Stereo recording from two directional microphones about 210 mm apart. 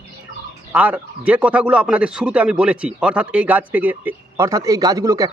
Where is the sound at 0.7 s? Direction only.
5° right (ahead or behind).